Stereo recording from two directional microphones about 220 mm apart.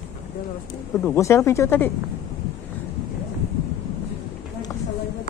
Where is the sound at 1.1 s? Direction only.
10° left (ahead or behind).